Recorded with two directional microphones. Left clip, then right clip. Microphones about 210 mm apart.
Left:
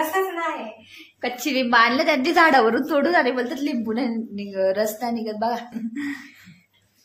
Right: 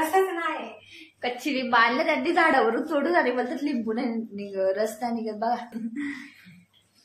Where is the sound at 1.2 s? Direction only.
40° left (ahead or behind).